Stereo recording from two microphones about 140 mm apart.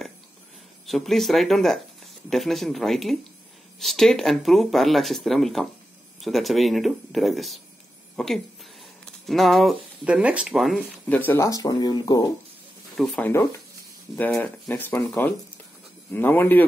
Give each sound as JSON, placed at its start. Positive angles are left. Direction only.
{"t": 0.8, "sound": "speech", "side_deg": 0}
{"t": 11.1, "sound": "speech", "side_deg": 15}
{"t": 12.9, "sound": "speech", "side_deg": 5}
{"t": 13.2, "sound": "speech", "side_deg": 15}